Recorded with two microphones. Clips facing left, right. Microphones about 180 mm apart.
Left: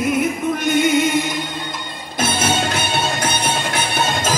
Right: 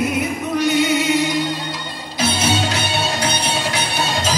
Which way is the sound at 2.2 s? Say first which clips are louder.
Even; 50° left (ahead or behind).